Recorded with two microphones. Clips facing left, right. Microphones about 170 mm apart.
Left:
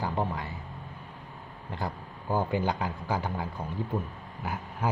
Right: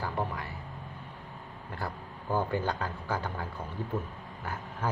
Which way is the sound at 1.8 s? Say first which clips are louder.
Left 2 dB; 15° left (ahead or behind).